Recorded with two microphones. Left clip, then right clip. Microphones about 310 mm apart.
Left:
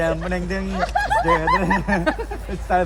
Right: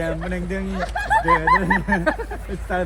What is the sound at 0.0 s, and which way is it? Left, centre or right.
Speech, left.